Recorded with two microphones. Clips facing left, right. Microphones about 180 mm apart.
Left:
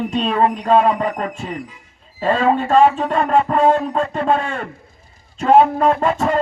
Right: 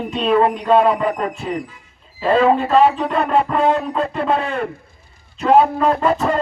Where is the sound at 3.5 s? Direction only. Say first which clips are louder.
Left 2 dB; 40° left (ahead or behind).